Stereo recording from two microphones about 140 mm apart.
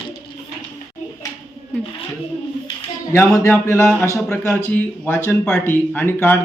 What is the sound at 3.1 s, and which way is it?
A man's voice, 20° left (ahead or behind).